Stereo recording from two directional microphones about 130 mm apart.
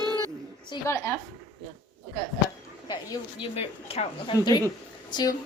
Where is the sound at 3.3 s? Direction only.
45° left (ahead or behind).